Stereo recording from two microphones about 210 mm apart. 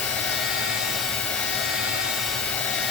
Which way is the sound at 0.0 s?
5° left (ahead or behind).